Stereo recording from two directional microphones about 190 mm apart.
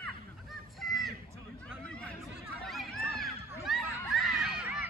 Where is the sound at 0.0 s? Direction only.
Centre (ahead or behind).